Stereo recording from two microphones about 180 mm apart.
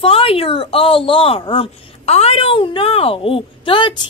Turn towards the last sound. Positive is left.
turn(degrees=30)  # may be behind; listen again after turning